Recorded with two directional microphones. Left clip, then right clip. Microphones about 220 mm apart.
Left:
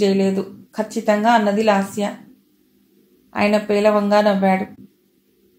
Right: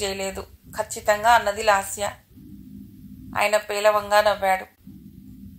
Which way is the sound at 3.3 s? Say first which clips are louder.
Left 4 dB; 25° right (ahead or behind).